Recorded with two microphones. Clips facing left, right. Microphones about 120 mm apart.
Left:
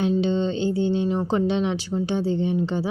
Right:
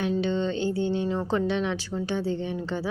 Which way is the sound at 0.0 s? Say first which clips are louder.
Left 4 dB; 20° left (ahead or behind).